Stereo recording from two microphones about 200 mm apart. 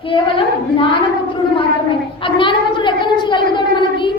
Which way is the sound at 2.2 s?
25° left (ahead or behind).